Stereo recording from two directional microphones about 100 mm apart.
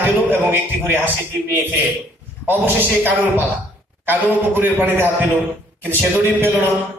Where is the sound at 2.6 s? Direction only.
20° right (ahead or behind).